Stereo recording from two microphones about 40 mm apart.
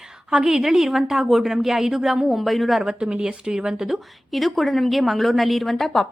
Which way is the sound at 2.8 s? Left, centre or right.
Centre.